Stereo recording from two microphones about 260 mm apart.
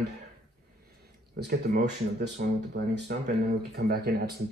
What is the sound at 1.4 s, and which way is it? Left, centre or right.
Speech, right.